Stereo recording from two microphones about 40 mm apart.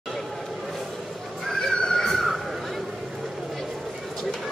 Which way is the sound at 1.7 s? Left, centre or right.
Centre.